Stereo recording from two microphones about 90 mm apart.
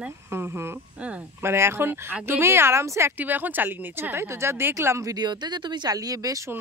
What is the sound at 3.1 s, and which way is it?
Speech, 20° right (ahead or behind).